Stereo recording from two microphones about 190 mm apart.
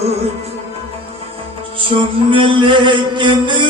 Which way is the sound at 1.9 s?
25° right (ahead or behind).